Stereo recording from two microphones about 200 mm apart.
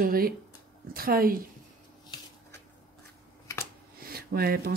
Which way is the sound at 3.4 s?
15° left (ahead or behind).